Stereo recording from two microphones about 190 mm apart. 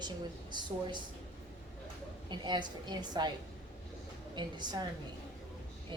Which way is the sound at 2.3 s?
25° right (ahead or behind).